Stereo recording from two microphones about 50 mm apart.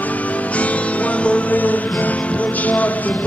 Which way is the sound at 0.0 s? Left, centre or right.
Left.